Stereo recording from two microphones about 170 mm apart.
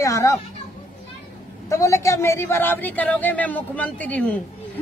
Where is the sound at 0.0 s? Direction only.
15° left (ahead or behind).